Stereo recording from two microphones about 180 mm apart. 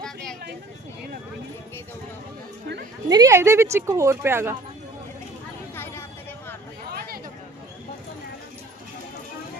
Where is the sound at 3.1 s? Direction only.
20° right (ahead or behind).